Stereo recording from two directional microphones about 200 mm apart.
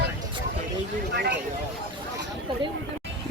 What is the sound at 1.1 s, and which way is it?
Speech, 55° right (ahead or behind).